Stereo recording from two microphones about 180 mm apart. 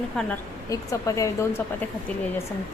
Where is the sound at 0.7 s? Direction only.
20° left (ahead or behind).